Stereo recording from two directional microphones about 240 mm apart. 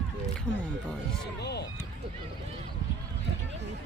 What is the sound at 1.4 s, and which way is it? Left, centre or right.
Speech, left.